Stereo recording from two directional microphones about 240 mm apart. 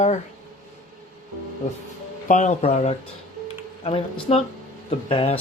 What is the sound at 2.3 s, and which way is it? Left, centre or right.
Speech, left.